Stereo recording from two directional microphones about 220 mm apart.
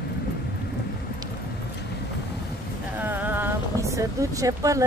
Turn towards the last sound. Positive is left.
turn(degrees=-15)  # may be behind; listen again after turning